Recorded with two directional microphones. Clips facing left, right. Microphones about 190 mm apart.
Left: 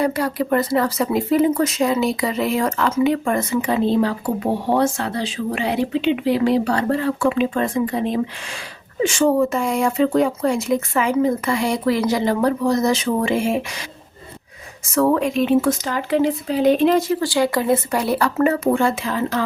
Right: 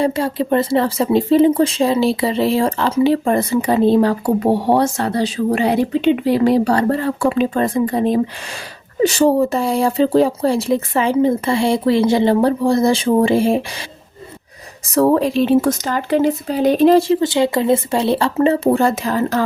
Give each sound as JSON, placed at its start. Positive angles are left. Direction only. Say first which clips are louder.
{"t": 0.0, "sound": "speech", "louder": "right 2 dB", "side_deg": -25}
{"t": 14.8, "sound": "speech", "louder": "right 3 dB", "side_deg": -35}